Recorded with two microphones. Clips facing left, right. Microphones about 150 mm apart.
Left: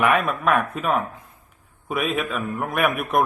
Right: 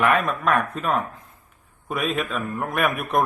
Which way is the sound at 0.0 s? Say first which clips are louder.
Left 1 dB; 10° left (ahead or behind).